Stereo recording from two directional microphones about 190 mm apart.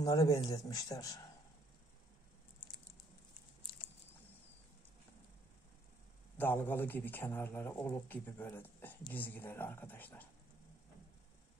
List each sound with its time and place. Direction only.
0.0 s a man's voice: 15° left (ahead or behind)
6.3 s a man's voice: 10° left (ahead or behind)